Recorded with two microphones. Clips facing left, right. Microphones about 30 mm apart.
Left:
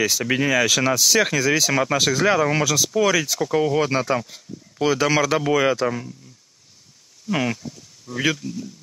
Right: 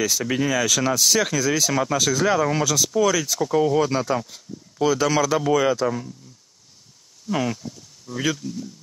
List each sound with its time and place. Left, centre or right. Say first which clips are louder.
0.1 s speech: left 2 dB; centre
4.8 s speech: left 1 dB; left
7.2 s speech: left 1 dB; centre